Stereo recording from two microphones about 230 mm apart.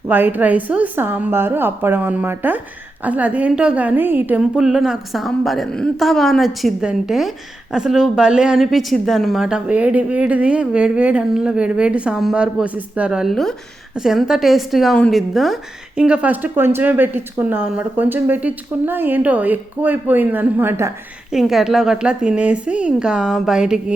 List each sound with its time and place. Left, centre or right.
0.1 s a woman's voice: centre